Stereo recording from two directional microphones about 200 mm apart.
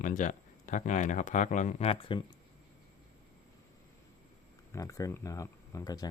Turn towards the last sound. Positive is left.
turn(degrees=20)  # may be behind; listen again after turning